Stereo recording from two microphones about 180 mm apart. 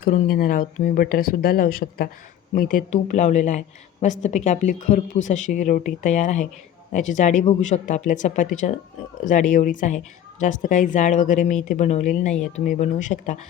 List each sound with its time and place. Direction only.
0.0 s speech: 50° left (ahead or behind)